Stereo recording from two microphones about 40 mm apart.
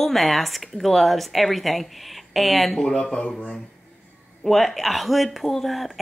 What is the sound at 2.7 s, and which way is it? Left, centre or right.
Speech, centre.